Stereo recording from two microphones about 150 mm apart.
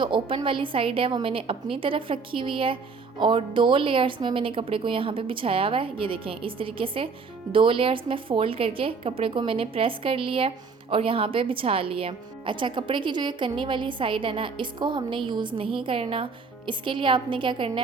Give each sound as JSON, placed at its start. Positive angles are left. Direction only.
{"t": 0.0, "sound": "a woman's voice", "side_deg": -35}